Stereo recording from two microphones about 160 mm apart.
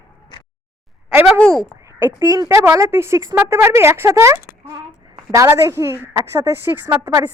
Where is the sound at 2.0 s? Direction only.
20° right (ahead or behind).